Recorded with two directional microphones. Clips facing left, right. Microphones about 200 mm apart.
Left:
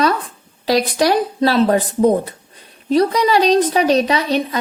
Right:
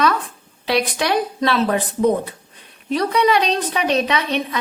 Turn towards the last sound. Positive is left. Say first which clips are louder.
# left 4 dB
turn(degrees=35)  # may be behind; listen again after turning